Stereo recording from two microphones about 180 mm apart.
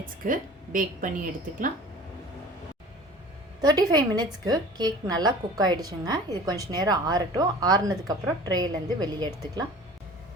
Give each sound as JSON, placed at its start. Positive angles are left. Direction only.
{"t": 0.0, "sound": "a woman's voice", "side_deg": -50}
{"t": 3.6, "sound": "a woman's voice", "side_deg": -20}